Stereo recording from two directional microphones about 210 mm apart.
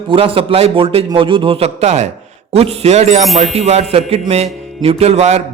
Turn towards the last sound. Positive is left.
turn(degrees=-30)  # may be behind; listen again after turning